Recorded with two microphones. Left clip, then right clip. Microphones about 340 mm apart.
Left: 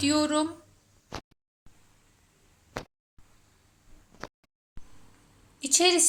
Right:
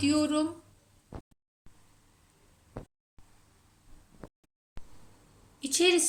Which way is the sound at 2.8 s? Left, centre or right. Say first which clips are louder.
Left 8 dB; left.